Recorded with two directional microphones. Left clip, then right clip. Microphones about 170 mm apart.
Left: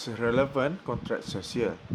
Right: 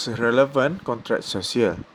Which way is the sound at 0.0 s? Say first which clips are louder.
Right 7 dB; 25° right (ahead or behind).